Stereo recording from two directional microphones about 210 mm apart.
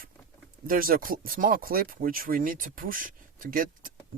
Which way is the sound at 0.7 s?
45° right (ahead or behind).